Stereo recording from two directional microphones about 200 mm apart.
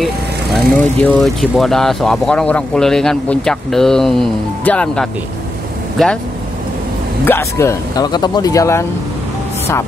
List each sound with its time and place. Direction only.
0.0 s speech: centre (ahead or behind)
7.2 s speech: 15° left (ahead or behind)